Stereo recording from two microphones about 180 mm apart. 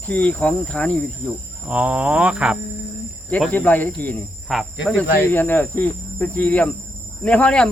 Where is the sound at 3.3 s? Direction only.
10° left (ahead or behind).